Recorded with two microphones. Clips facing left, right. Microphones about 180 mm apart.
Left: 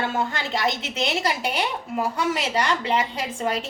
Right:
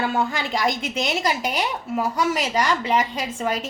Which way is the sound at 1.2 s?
10° right (ahead or behind).